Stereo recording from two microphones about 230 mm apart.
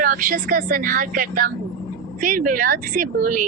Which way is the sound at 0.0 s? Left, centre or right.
Right.